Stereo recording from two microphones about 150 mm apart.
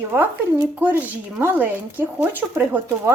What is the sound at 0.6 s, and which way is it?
Speech, 10° right (ahead or behind).